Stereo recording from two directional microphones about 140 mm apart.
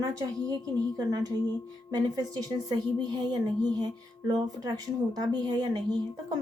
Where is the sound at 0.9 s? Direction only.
30° right (ahead or behind).